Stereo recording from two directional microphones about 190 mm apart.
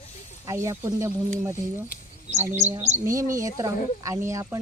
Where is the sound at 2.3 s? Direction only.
35° right (ahead or behind).